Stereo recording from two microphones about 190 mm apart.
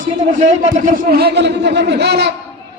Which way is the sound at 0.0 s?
40° right (ahead or behind).